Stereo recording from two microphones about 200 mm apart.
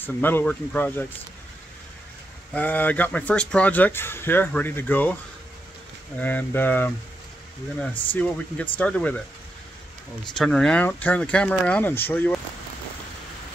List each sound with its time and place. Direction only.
0.0 s speech: 10° left (ahead or behind)
2.5 s speech: 10° left (ahead or behind)
6.1 s speech: 10° left (ahead or behind)
8.1 s speech: 10° left (ahead or behind)
10.3 s speech: 5° left (ahead or behind)